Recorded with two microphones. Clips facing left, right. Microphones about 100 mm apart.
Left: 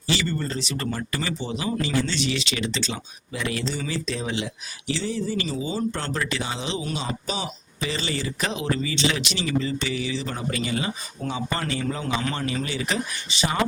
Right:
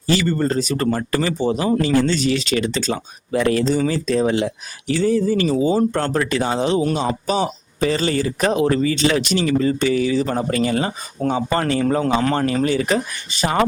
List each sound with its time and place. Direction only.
0.1 s a man's voice: 50° right (ahead or behind)